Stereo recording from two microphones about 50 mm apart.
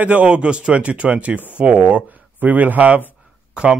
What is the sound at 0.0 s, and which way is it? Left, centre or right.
A man's voice, right.